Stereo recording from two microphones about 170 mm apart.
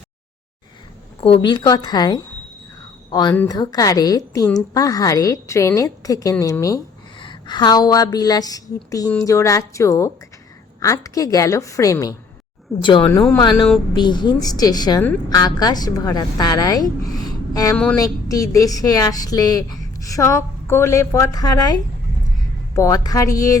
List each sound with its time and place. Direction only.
1.2 s a woman's voice: 30° left (ahead or behind)